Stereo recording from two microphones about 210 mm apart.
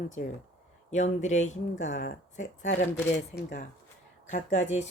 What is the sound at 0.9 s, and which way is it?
Speech, 35° left (ahead or behind).